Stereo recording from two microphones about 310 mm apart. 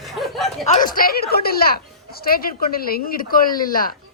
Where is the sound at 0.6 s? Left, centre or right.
Left.